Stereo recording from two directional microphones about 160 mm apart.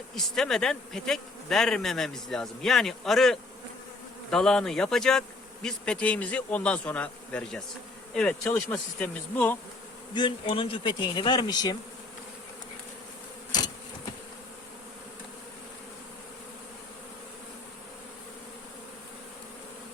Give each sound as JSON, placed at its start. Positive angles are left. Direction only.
{"t": 0.2, "sound": "speech", "side_deg": 5}
{"t": 10.2, "sound": "speech", "side_deg": 30}